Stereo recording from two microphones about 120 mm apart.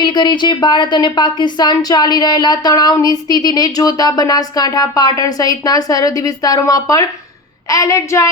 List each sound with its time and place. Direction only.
0.0 s a woman's voice: 35° left (ahead or behind)